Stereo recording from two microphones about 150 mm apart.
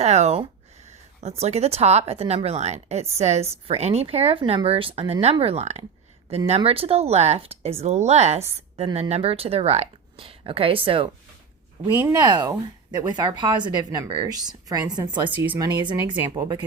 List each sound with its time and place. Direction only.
0.0 s speech: 45° right (ahead or behind)
11.9 s speech: 20° right (ahead or behind)